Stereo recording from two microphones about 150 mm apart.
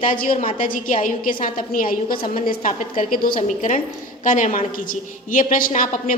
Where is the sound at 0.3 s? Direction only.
65° left (ahead or behind).